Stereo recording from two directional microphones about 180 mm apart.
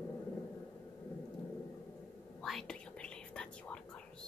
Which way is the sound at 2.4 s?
Centre (ahead or behind).